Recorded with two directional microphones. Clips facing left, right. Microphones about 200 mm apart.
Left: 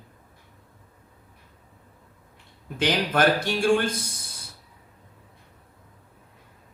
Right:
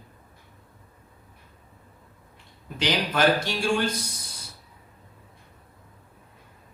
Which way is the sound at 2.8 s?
55° left (ahead or behind).